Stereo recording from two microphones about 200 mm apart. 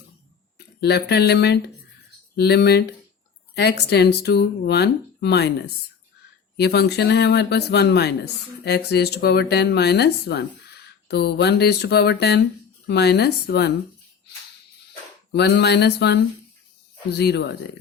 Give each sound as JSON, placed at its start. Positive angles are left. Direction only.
{"t": 0.8, "sound": "speech", "side_deg": 55}
{"t": 15.3, "sound": "speech", "side_deg": 55}